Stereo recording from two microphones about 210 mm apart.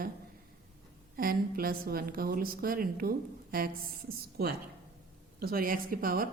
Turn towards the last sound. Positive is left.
turn(degrees=-45)  # may be behind; listen again after turning